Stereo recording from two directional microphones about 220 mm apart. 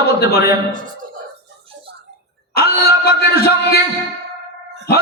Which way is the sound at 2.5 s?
45° left (ahead or behind).